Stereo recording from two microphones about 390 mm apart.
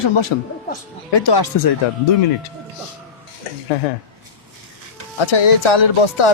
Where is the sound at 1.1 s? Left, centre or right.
Left.